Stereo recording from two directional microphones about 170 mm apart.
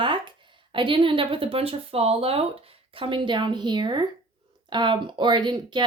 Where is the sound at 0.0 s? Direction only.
30° right (ahead or behind).